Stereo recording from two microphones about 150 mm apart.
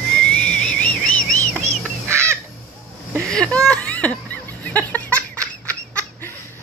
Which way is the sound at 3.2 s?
5° left (ahead or behind).